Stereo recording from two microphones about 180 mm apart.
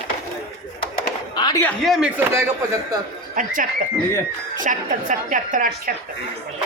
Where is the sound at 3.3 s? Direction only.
50° right (ahead or behind).